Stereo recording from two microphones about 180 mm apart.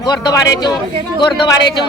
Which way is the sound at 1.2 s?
25° left (ahead or behind).